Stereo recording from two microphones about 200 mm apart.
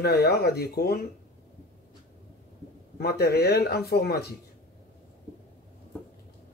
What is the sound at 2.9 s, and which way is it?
Speech, 50° left (ahead or behind).